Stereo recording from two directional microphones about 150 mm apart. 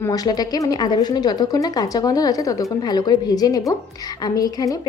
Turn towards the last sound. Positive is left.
turn(degrees=25)  # may be behind; listen again after turning